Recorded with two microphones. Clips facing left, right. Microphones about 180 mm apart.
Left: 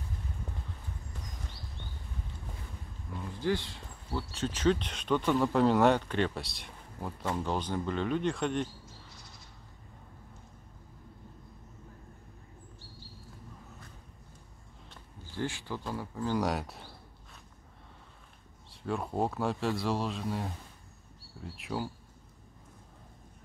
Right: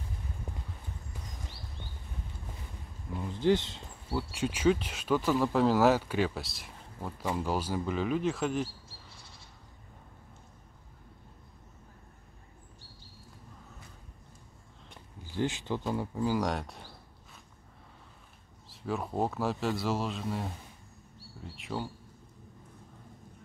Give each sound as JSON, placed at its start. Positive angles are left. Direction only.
{"t": 3.2, "sound": "speech", "side_deg": -20}
{"t": 4.1, "sound": "speech", "side_deg": -10}
{"t": 15.3, "sound": "speech", "side_deg": -20}
{"t": 16.3, "sound": "speech", "side_deg": 0}
{"t": 18.7, "sound": "speech", "side_deg": 0}